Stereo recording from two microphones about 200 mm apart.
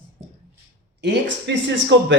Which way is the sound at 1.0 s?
60° right (ahead or behind).